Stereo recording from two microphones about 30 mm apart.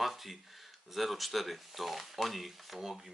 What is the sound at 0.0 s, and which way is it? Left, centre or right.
Speech, centre.